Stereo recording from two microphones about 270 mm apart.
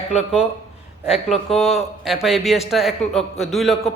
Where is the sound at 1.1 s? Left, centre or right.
Centre.